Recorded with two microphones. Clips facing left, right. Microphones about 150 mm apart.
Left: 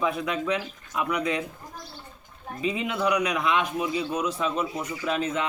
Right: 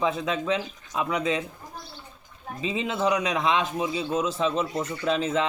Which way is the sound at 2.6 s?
25° right (ahead or behind).